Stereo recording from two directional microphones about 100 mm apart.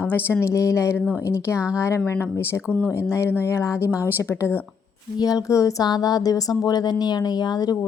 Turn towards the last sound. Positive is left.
turn(degrees=40)  # may be behind; listen again after turning